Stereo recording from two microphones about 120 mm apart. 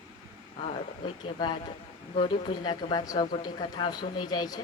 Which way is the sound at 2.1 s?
40° left (ahead or behind).